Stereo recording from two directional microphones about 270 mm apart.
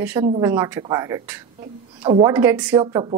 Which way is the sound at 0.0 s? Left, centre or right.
Centre.